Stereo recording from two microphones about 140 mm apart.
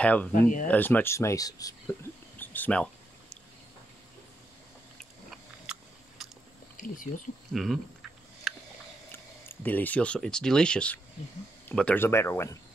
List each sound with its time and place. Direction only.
0.0 s speech: 10° left (ahead or behind)
0.3 s speech: 70° left (ahead or behind)
0.7 s speech: 10° left (ahead or behind)
2.3 s a sound: 15° left (ahead or behind)
5.3 s biting: 5° right (ahead or behind)
7.5 s speech: centre (ahead or behind)
8.5 s a sound: centre (ahead or behind)
9.1 s speech: 15° left (ahead or behind)